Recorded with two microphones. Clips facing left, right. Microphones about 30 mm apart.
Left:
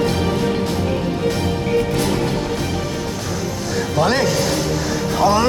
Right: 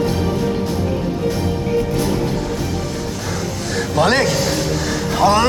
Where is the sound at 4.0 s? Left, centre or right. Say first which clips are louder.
Right 2 dB; centre.